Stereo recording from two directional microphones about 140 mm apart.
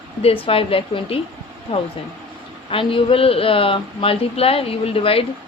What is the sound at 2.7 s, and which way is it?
A woman's voice, 40° left (ahead or behind).